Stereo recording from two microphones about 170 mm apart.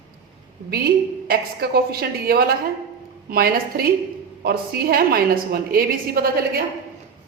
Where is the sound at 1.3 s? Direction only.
65° right (ahead or behind).